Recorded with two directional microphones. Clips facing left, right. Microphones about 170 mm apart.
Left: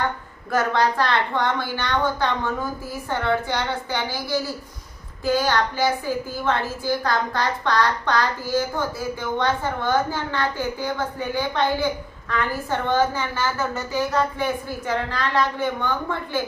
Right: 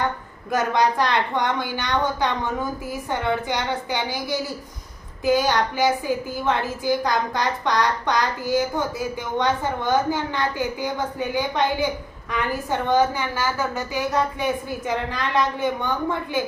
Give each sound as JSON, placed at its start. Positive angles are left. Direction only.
{"t": 0.5, "sound": "a woman's voice", "side_deg": -15}